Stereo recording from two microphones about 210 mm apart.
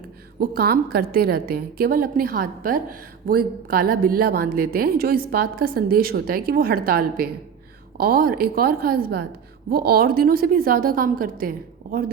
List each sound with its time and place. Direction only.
0.3 s a woman's voice: 45° right (ahead or behind)